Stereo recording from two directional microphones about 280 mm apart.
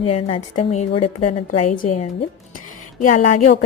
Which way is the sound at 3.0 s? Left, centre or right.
Left.